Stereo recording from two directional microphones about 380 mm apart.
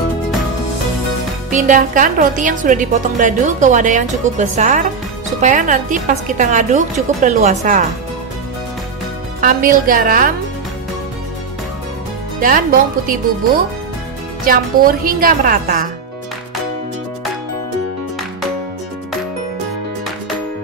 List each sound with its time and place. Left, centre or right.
1.5 s a woman's voice: centre
9.4 s a woman's voice: right
12.4 s a woman's voice: right
14.4 s a woman's voice: right